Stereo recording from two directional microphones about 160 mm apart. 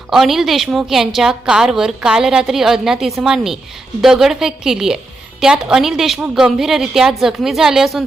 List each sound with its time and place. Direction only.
0.1 s a woman's voice: 5° right (ahead or behind)